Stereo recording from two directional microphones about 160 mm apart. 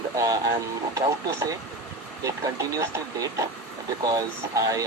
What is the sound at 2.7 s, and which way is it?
Speech, 20° right (ahead or behind).